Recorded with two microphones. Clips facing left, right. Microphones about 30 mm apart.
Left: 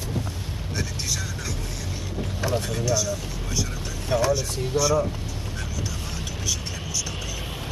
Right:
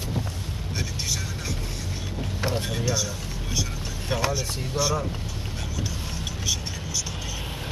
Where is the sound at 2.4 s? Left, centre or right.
Right.